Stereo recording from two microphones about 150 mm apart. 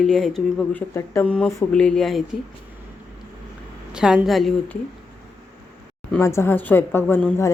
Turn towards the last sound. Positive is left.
turn(degrees=15)  # may be behind; listen again after turning